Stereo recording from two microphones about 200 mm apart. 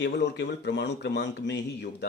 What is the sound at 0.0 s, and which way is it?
Speech, 60° left (ahead or behind).